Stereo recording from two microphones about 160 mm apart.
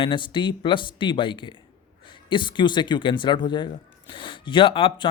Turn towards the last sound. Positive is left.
turn(degrees=35)  # may be behind; listen again after turning